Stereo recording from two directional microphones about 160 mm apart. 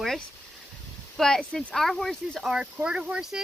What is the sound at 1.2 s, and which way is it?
Speech, 5° left (ahead or behind).